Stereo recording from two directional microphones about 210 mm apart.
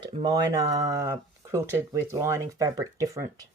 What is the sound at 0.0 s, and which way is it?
Speech, 20° right (ahead or behind).